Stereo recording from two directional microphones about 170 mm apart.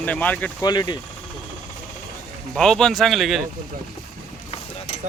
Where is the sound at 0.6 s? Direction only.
25° left (ahead or behind).